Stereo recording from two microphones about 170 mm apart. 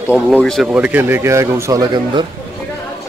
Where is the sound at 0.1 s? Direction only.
Centre (ahead or behind).